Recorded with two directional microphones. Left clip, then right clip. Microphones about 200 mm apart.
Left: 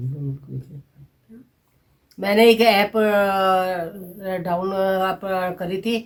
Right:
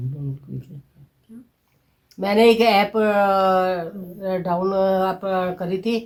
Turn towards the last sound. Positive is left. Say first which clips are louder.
# right 1 dB
turn(degrees=5)  # may be behind; listen again after turning